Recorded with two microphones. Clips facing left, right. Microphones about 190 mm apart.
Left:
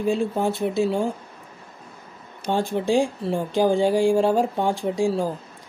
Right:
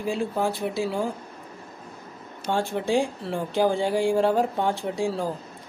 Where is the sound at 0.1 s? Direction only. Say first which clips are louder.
Left 1 dB; 25° left (ahead or behind).